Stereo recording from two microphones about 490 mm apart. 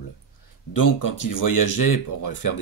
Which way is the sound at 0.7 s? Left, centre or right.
Left.